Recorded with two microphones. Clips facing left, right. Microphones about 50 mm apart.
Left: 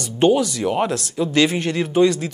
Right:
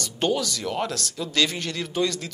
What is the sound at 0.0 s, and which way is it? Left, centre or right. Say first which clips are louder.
Speech: left 8 dB; left.